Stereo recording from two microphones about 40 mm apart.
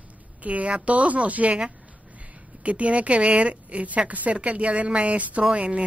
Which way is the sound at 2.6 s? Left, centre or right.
Right.